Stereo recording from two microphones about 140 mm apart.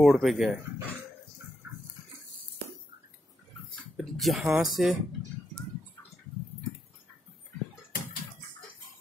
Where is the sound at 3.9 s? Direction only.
Centre (ahead or behind).